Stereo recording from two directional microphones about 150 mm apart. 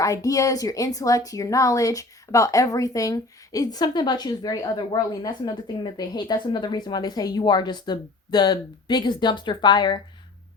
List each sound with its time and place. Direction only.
0.0 s a woman's voice: 20° left (ahead or behind)